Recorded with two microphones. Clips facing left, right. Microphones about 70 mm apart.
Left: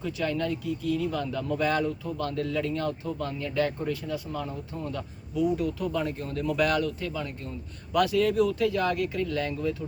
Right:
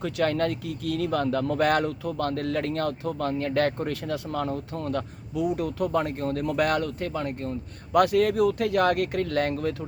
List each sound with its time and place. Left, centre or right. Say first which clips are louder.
0.0 s speech: right 4 dB; right